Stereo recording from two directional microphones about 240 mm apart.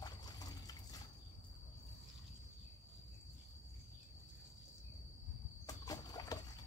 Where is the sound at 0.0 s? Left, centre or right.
Centre.